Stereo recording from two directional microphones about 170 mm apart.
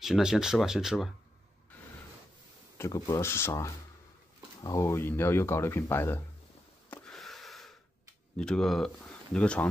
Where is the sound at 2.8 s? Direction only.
20° left (ahead or behind).